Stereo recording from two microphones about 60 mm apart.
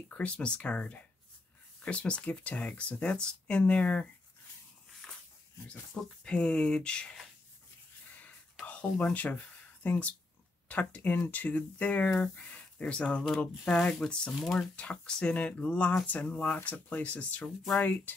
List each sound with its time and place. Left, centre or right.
0.1 s speech: centre
5.0 s a sound: centre
5.9 s speech: centre
8.1 s whispering: left
8.6 s speech: centre